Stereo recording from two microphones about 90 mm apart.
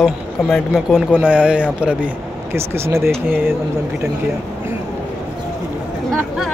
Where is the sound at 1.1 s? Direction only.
15° right (ahead or behind).